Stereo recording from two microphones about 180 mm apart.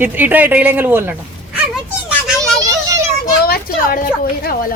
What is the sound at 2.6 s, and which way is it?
Child singing, 20° right (ahead or behind).